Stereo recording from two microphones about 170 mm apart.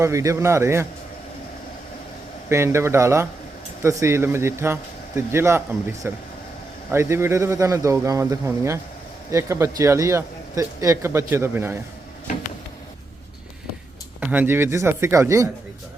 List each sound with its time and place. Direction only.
0.0 s a man's voice: 20° right (ahead or behind)
2.5 s a man's voice: 15° right (ahead or behind)
14.2 s a man's voice: 10° right (ahead or behind)